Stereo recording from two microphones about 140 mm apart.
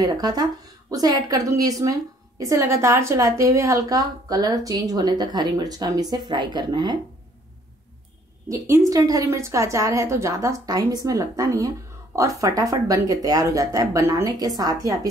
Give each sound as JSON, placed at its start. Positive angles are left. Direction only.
{"t": 0.0, "sound": "a woman's voice", "side_deg": -30}
{"t": 8.5, "sound": "a woman's voice", "side_deg": -20}